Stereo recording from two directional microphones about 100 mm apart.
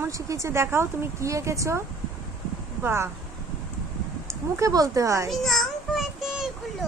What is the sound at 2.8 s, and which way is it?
Speech, 25° right (ahead or behind).